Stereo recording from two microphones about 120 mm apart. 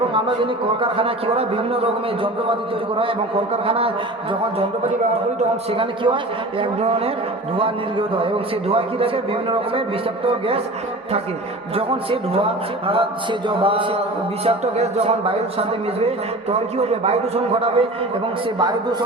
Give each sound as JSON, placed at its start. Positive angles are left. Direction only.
{"t": 0.1, "sound": "speech", "side_deg": -45}
{"t": 3.5, "sound": "speech", "side_deg": -55}
{"t": 5.7, "sound": "a man's voice", "side_deg": -45}
{"t": 10.2, "sound": "speech", "side_deg": -50}
{"t": 11.7, "sound": "speech", "side_deg": -50}
{"t": 13.5, "sound": "speech", "side_deg": -45}
{"t": 14.4, "sound": "a man's voice", "side_deg": -60}
{"t": 18.6, "sound": "a man's voice", "side_deg": -35}